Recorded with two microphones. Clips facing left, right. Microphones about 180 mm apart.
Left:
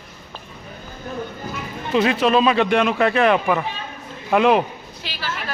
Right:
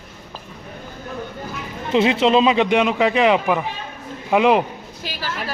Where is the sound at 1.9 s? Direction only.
25° right (ahead or behind).